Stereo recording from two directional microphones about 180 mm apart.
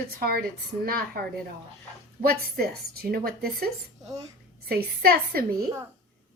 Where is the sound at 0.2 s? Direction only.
55° right (ahead or behind).